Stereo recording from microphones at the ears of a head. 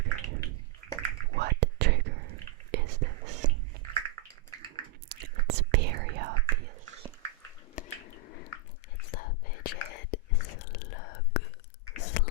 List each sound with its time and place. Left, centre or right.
0.0 s bathtub: right
1.0 s whispering: right
7.8 s a sound: left
9.0 s whispering: left
11.9 s chewing: left